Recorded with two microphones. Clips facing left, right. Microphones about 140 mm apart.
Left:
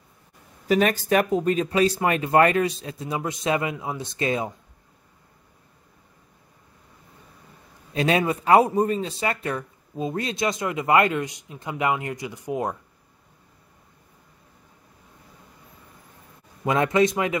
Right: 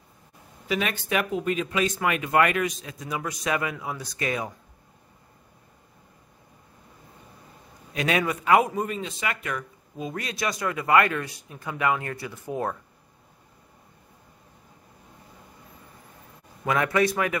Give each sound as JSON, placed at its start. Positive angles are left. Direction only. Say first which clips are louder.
{"t": 0.7, "sound": "speech", "louder": "left 7 dB", "side_deg": 40}
{"t": 7.9, "sound": "speech", "louder": "left 4 dB", "side_deg": 30}
{"t": 16.6, "sound": "speech", "louder": "left 3 dB", "side_deg": 25}